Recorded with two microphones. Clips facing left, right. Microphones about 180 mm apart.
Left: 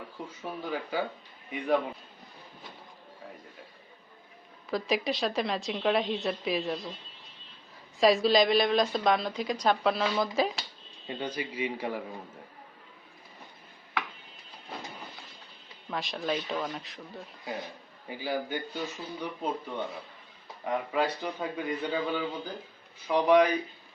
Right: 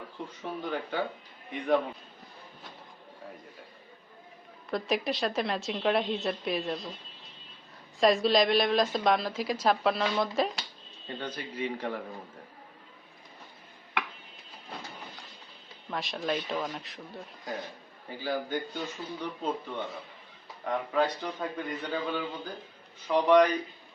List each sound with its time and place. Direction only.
0.4 s a woman's voice: 5° left (ahead or behind)
4.7 s a woman's voice: centre (ahead or behind)
7.9 s a woman's voice: centre (ahead or behind)
11.0 s a man's voice: 10° left (ahead or behind)
15.9 s a woman's voice: centre (ahead or behind)
18.1 s a man's voice: 10° left (ahead or behind)
20.7 s a man's voice: 5° left (ahead or behind)